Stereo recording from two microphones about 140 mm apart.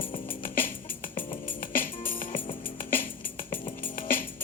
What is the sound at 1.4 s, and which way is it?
Music, 85° left.